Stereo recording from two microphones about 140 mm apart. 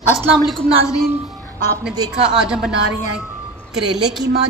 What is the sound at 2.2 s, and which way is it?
Speech, 5° right (ahead or behind).